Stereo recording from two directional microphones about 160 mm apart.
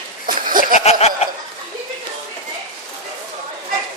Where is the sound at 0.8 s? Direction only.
40° left (ahead or behind).